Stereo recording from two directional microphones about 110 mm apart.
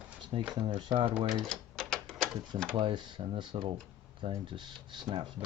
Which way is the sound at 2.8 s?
50° right (ahead or behind).